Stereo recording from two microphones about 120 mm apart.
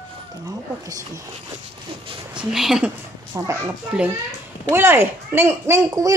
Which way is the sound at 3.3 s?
30° right (ahead or behind).